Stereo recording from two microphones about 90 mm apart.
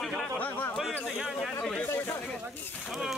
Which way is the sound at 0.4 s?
20° left (ahead or behind).